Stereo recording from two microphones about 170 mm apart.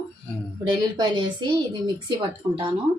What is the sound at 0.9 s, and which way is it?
A woman's voice, 25° right (ahead or behind).